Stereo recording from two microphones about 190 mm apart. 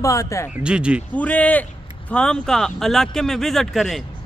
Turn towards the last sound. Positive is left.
turn(degrees=0)  # may be behind; listen again after turning